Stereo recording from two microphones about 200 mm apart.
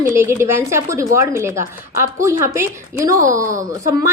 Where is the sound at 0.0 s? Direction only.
10° right (ahead or behind).